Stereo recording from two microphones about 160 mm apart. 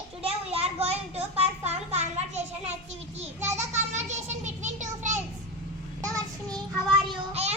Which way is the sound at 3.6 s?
45° right (ahead or behind).